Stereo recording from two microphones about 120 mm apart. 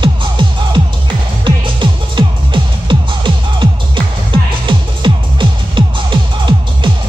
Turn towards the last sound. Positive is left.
turn(degrees=-40)  # may be behind; listen again after turning